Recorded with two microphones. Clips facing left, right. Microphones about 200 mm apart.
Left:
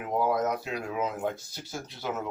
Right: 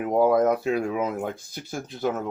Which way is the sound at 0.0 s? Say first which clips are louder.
Right 7 dB; 55° right (ahead or behind).